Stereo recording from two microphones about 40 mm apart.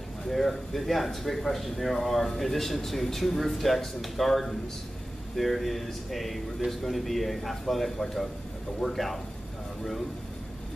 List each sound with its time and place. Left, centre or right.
0.3 s speech: centre